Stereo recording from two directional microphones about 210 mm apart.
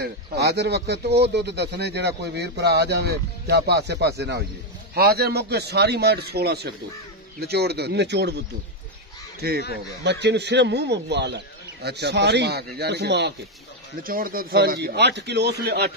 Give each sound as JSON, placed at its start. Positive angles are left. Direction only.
{"t": 0.0, "sound": "a man's voice", "side_deg": -50}
{"t": 14.0, "sound": "a man's voice", "side_deg": -45}